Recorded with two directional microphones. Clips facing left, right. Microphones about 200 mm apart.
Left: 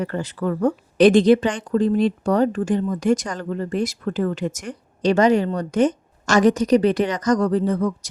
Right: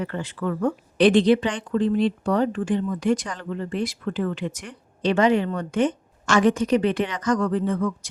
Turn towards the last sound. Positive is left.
turn(degrees=40)  # may be behind; listen again after turning